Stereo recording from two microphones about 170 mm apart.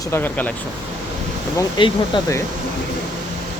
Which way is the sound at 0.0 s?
15° left (ahead or behind).